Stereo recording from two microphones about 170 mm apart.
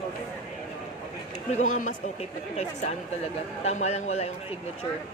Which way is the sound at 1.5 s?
50° left (ahead or behind).